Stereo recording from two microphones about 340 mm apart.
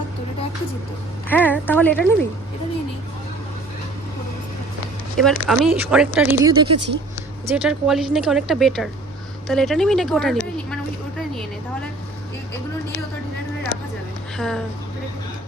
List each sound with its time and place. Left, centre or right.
1.3 s speech: centre
5.2 s speech: centre
6.7 s speech: right
7.5 s speech: centre
14.3 s speech: centre